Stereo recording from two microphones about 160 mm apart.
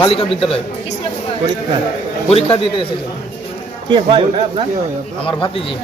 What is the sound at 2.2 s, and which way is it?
Speech, 40° left (ahead or behind).